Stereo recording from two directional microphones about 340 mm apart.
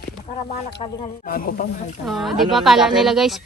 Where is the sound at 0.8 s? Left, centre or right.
Left.